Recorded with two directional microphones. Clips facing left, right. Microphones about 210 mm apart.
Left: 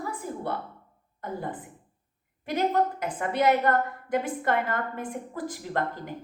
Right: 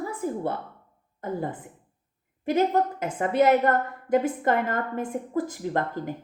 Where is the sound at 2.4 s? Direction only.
45° right (ahead or behind).